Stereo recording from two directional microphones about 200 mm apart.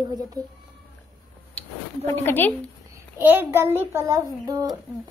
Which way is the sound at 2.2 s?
10° left (ahead or behind).